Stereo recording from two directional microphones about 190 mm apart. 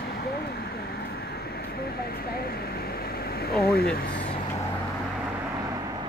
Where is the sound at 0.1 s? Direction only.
55° left (ahead or behind).